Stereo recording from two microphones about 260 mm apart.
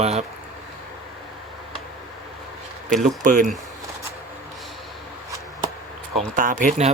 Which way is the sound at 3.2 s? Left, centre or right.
Right.